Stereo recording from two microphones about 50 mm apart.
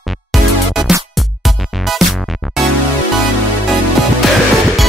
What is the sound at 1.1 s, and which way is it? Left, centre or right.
Music, centre.